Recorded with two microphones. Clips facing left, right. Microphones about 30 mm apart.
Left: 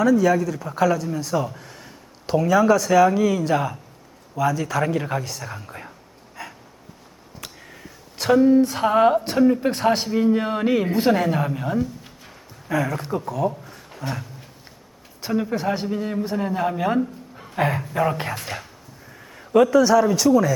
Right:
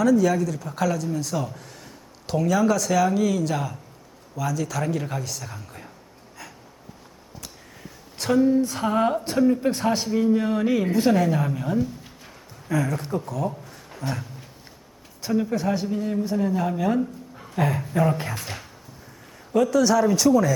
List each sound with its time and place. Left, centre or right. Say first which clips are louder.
0.0 s a woman's voice: left 2 dB; centre
6.4 s a sound: left 6 dB; centre
8.3 s a woman's voice: left 4 dB; centre
17.0 s a sound: left 2 dB; centre
17.9 s speech: right 1 dB; centre
18.2 s speech: left 3 dB; left
19.6 s speech: left 2 dB; centre